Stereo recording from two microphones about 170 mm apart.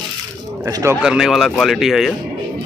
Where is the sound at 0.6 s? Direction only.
15° right (ahead or behind).